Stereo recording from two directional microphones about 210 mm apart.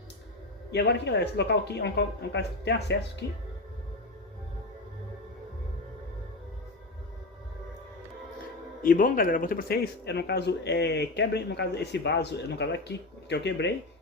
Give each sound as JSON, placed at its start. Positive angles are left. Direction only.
{"t": 0.7, "sound": "speech", "side_deg": 55}
{"t": 8.8, "sound": "speech", "side_deg": 40}